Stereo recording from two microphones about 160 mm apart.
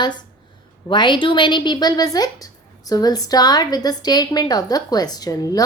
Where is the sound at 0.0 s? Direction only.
25° left (ahead or behind).